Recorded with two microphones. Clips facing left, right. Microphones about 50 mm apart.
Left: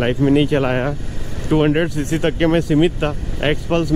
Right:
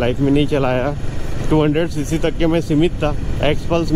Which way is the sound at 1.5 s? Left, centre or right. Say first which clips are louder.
Even; centre.